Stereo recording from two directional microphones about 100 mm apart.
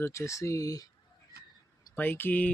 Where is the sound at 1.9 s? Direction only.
20° left (ahead or behind).